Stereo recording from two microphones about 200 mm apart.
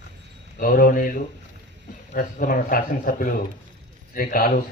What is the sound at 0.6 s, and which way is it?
Speech, 45° left (ahead or behind).